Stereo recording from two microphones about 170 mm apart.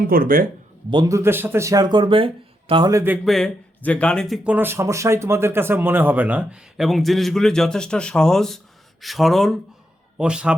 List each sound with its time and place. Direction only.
0.1 s speech: 60° right (ahead or behind)
0.9 s speech: 20° right (ahead or behind)
2.9 s speech: 15° right (ahead or behind)
3.2 s speech: 5° left (ahead or behind)
4.4 s speech: 10° right (ahead or behind)